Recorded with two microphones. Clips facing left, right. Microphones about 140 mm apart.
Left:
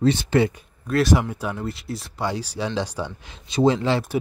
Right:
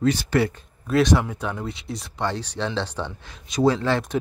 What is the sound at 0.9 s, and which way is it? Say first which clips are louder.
Speech: even; 5° left (ahead or behind).